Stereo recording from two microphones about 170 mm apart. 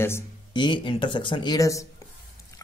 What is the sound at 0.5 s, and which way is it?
Speech, 30° left (ahead or behind).